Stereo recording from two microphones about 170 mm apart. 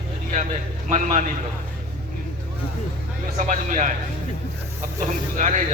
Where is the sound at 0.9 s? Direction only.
45° right (ahead or behind).